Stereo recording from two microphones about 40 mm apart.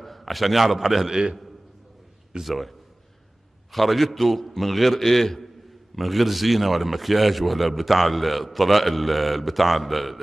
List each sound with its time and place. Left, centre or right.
0.0 s a man's voice: centre
1.1 s a man's voice: centre
2.4 s a man's voice: centre
3.7 s a man's voice: centre